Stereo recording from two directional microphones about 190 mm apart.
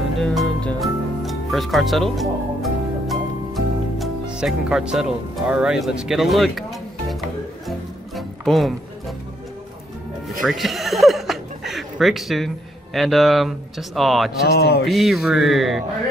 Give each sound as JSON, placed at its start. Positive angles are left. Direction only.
{"t": 0.2, "sound": "music", "side_deg": 0}
{"t": 10.4, "sound": "speech", "side_deg": 0}
{"t": 14.4, "sound": "speech", "side_deg": 55}
{"t": 14.9, "sound": "speech", "side_deg": 0}